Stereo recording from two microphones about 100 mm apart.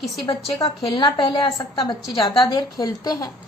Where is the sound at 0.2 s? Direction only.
55° left (ahead or behind).